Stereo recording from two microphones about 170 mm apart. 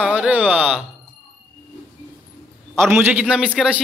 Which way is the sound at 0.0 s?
5° right (ahead or behind).